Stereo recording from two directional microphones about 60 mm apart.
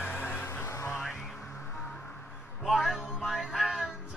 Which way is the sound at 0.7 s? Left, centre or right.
Left.